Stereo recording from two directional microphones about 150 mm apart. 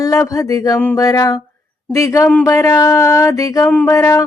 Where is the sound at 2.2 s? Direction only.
10° left (ahead or behind).